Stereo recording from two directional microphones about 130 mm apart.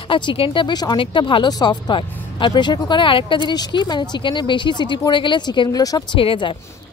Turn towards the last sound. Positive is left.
turn(degrees=40)  # may be behind; listen again after turning